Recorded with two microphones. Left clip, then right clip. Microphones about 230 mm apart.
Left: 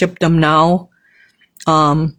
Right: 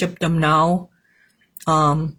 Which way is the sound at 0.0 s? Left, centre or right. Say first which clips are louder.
Left 6 dB; left.